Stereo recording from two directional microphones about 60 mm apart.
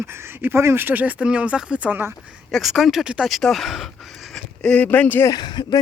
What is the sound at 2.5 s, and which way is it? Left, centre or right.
Speech, centre.